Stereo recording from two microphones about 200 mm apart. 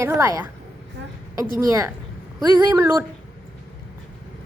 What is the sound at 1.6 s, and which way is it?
A woman's voice, 15° right (ahead or behind).